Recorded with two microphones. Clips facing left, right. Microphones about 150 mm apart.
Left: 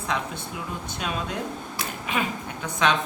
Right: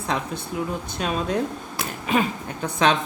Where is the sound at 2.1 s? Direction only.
40° right (ahead or behind).